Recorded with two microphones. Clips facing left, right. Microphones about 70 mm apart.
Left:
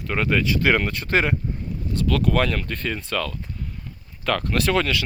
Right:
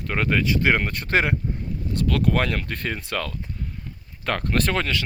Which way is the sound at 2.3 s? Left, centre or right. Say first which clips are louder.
Left 2 dB; right.